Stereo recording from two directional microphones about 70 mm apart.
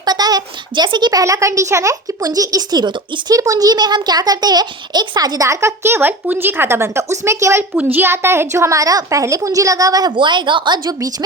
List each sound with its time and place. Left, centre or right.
0.0 s speech: right
1.2 s a child's voice: right
7.8 s a woman's voice: right
8.8 s a woman's voice: right